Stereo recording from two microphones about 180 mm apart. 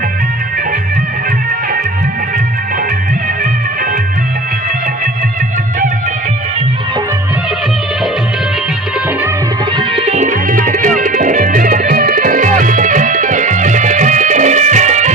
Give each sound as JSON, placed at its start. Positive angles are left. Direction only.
{"t": 9.7, "sound": "music", "side_deg": -35}